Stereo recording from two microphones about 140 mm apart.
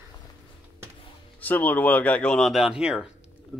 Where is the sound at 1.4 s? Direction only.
10° left (ahead or behind).